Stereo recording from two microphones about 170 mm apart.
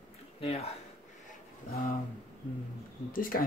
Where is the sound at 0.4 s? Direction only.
35° left (ahead or behind).